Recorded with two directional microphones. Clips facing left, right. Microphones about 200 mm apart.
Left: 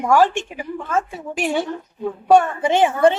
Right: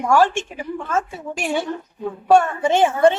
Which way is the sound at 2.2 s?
15° left (ahead or behind).